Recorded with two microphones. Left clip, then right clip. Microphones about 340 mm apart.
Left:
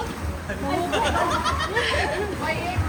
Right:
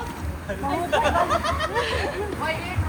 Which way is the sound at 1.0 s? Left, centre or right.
Right.